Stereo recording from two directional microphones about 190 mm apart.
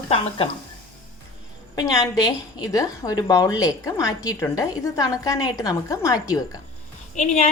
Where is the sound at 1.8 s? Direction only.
20° left (ahead or behind).